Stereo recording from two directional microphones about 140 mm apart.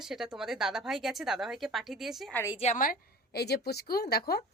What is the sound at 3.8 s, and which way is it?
Speech, 90° left.